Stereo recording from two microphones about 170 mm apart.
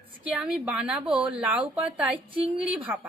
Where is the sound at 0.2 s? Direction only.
10° right (ahead or behind).